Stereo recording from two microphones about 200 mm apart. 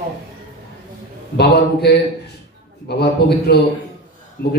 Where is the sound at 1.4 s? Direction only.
55° left (ahead or behind).